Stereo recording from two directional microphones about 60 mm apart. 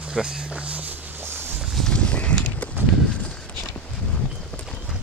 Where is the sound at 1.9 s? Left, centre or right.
Centre.